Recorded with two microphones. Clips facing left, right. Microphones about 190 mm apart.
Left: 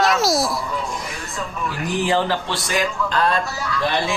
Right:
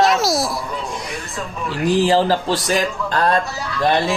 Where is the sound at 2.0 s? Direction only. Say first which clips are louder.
Right 3 dB; 35° right (ahead or behind).